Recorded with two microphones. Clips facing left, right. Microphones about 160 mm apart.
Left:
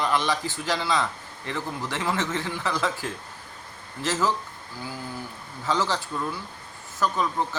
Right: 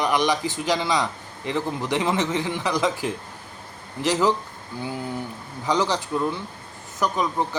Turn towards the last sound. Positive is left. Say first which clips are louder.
# right 2 dB
turn(degrees=-15)  # may be behind; listen again after turning